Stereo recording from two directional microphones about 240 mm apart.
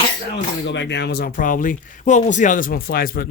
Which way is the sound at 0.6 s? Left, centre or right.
Left.